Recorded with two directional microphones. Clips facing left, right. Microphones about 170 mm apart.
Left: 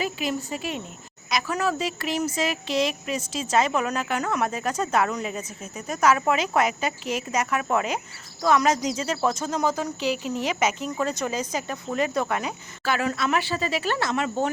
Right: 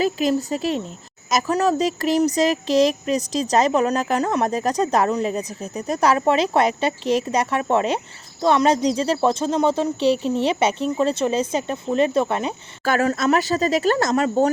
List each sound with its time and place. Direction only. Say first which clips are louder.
0.0 s speech: right 8 dB; 40° right (ahead or behind)
12.8 s speech: right 6 dB; 45° right (ahead or behind)